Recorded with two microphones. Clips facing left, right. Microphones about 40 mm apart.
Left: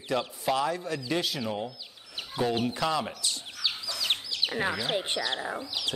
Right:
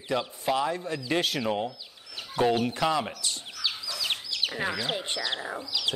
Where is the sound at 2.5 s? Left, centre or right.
Right.